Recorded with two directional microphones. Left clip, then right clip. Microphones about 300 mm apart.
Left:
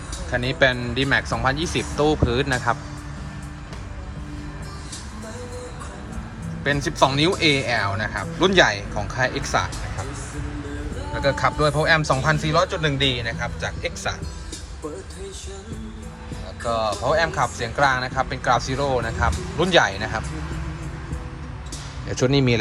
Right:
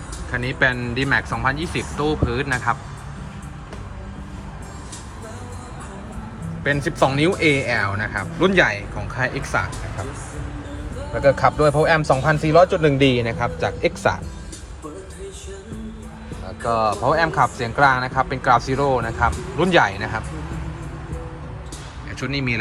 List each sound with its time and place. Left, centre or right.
0.3 s speech: centre
6.7 s speech: centre
11.2 s speech: centre
16.6 s speech: centre
22.1 s speech: centre